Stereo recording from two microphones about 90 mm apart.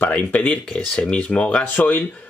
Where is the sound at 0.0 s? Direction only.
15° left (ahead or behind).